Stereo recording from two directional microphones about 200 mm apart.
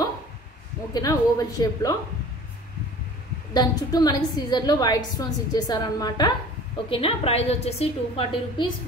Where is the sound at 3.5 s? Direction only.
20° left (ahead or behind).